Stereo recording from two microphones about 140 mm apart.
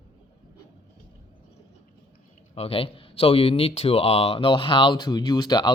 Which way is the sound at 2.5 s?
40° left (ahead or behind).